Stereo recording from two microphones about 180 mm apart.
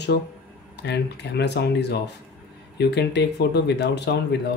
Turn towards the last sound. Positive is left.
turn(degrees=70)  # may be behind; listen again after turning